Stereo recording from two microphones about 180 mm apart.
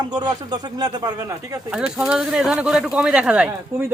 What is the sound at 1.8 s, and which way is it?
Speech, 5° right (ahead or behind).